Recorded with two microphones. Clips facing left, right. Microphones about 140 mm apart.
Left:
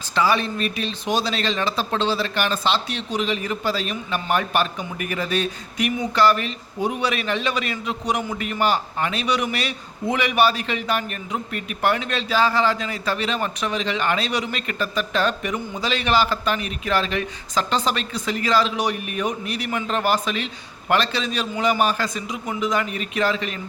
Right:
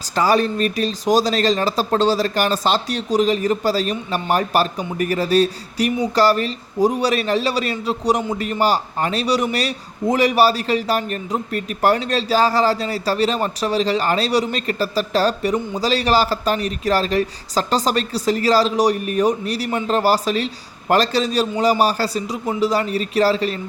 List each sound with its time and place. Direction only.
0.0 s speech: 40° right (ahead or behind)